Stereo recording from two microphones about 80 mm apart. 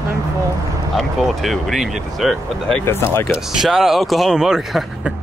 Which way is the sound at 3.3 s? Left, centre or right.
Centre.